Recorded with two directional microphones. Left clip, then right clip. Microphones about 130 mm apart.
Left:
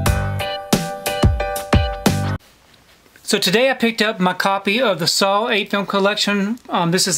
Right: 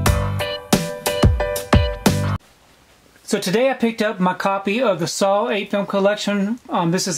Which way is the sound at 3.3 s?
25° left (ahead or behind).